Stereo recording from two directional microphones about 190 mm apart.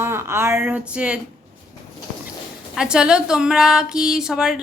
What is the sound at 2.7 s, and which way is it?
A woman's voice, 5° right (ahead or behind).